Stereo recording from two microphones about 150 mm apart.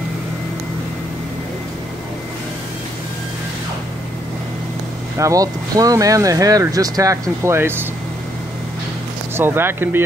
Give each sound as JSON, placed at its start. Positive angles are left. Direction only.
{"t": 5.1, "sound": "speech", "side_deg": -20}
{"t": 9.4, "sound": "speech", "side_deg": -15}